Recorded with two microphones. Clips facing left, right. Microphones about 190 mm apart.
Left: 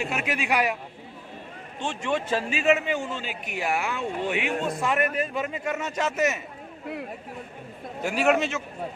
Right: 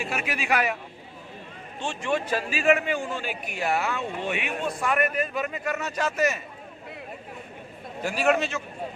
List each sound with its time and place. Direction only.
0.4 s a man's voice: 10° left (ahead or behind)
1.8 s speech: 20° left (ahead or behind)
8.0 s speech: 15° left (ahead or behind)